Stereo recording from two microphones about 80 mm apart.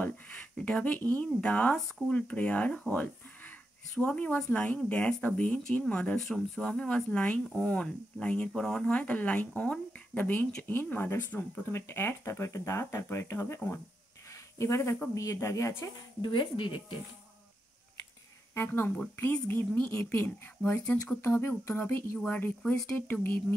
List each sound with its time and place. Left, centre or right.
0.0 s speech: centre; by 13.6 s left
14.3 s a sound: left
15.1 s speech: left
16.2 s speech: left
18.5 s speech: left
21.1 s speech: left